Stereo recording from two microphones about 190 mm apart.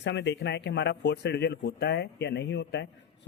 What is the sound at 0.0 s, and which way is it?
Speech, 65° left (ahead or behind).